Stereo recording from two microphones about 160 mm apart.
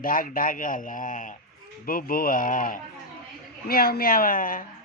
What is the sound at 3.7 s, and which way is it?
Speech, 70° left (ahead or behind).